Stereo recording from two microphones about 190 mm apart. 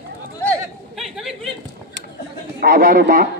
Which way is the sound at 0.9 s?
Centre (ahead or behind).